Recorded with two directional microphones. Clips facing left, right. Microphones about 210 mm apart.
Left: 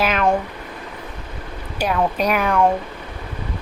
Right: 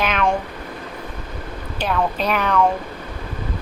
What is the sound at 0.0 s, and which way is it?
Speech, 5° left (ahead or behind).